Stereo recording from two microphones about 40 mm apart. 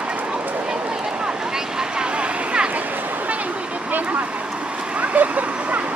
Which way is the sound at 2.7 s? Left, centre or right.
Right.